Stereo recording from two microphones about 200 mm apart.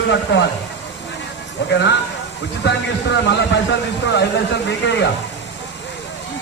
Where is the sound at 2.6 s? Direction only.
60° left (ahead or behind).